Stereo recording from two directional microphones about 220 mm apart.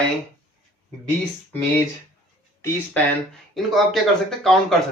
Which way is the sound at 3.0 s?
5° left (ahead or behind).